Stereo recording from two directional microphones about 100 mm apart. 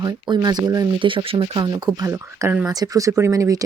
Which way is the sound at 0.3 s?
45° right (ahead or behind).